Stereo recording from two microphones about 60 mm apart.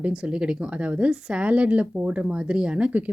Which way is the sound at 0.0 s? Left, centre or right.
Centre.